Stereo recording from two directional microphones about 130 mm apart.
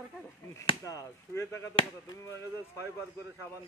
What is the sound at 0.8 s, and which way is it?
Speech, 25° left (ahead or behind).